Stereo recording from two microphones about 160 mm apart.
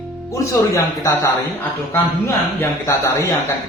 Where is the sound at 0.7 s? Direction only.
20° left (ahead or behind).